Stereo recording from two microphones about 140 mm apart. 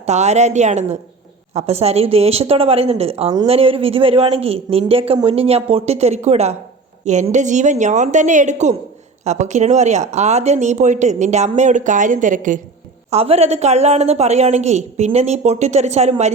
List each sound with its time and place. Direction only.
0.0 s a woman's voice: 55° right (ahead or behind)
13.1 s a woman's voice: 45° right (ahead or behind)